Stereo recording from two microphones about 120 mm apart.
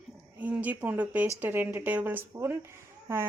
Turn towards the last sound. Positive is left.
turn(degrees=-20)  # may be behind; listen again after turning